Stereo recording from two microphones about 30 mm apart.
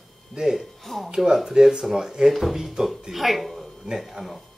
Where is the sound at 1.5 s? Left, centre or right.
Centre.